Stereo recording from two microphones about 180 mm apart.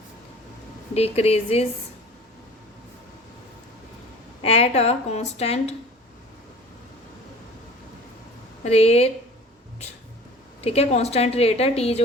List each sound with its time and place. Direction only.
0.9 s a woman's voice: 35° left (ahead or behind)
4.4 s a woman's voice: 35° left (ahead or behind)
8.6 s a woman's voice: 35° left (ahead or behind)
10.6 s a woman's voice: 35° left (ahead or behind)